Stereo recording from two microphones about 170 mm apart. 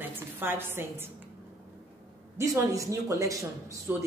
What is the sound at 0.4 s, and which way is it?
Speech, 15° right (ahead or behind).